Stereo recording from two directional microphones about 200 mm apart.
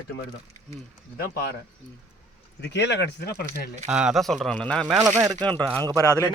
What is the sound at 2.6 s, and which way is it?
Speech, 60° left (ahead or behind).